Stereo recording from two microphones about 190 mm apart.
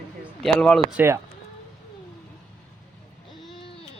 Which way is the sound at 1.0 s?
15° right (ahead or behind).